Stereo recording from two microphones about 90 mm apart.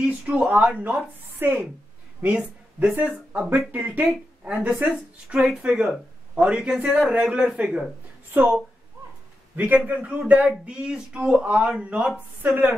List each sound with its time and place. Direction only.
0.0 s a man's voice: 10° right (ahead or behind)
9.6 s a man's voice: 20° right (ahead or behind)